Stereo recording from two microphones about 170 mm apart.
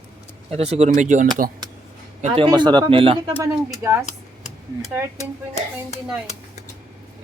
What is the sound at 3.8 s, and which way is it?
Speech, 15° right (ahead or behind).